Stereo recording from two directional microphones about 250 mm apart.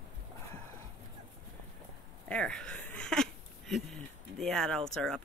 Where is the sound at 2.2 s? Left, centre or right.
Centre.